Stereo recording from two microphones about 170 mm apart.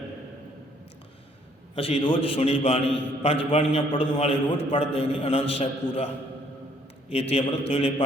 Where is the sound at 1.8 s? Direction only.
30° left (ahead or behind).